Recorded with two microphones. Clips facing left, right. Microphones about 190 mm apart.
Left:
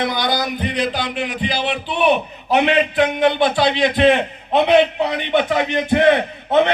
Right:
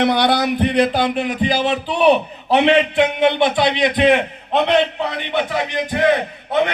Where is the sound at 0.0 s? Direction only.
65° right (ahead or behind); by 3.3 s 25° right (ahead or behind).